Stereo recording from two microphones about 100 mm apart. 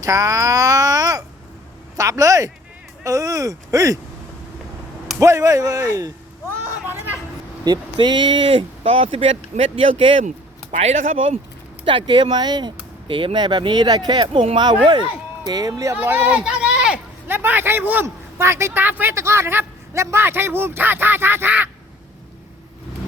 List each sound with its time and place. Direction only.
0.0 s a sound: 35° right (ahead or behind)
2.0 s speech: 35° right (ahead or behind)
5.2 s speech: 35° right (ahead or behind)
6.8 s children playing: 20° right (ahead or behind)
7.6 s speech: 45° right (ahead or behind); by 10.2 s 65° right (ahead or behind)
10.8 s speech: 80° right
11.9 s speech: 55° right (ahead or behind)
14.3 s speech: 60° right (ahead or behind)
15.4 s speech: 40° right (ahead or behind)
16.0 s a man's voice: 15° right (ahead or behind)